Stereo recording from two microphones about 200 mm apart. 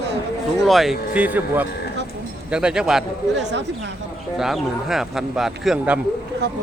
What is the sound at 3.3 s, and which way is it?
Speech, 60° right (ahead or behind).